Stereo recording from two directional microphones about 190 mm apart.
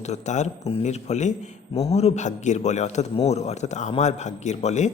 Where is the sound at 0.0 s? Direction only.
35° left (ahead or behind).